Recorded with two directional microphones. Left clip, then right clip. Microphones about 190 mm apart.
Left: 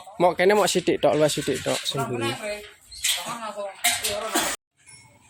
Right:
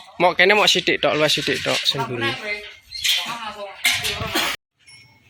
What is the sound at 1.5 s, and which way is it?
Speech, centre (ahead or behind).